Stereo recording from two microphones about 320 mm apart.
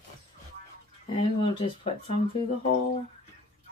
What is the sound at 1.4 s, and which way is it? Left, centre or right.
Speech, centre.